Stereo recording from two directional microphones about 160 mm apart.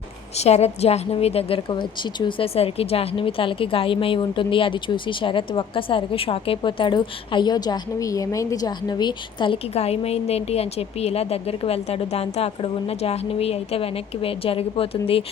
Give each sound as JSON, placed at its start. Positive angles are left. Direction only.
{"t": 0.3, "sound": "a woman's voice", "side_deg": 40}